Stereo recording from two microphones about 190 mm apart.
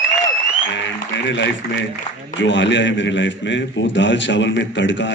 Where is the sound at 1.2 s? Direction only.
70° left (ahead or behind).